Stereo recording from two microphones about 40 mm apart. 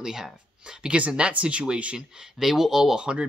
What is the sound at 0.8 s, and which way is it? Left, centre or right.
Speech, right.